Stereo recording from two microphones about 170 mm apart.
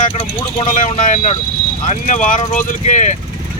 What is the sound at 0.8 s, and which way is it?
Speech, 50° left (ahead or behind).